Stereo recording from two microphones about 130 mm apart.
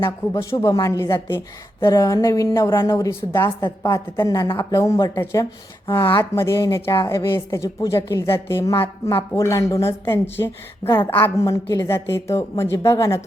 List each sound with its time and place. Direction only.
0.5 s a woman's voice: 25° left (ahead or behind)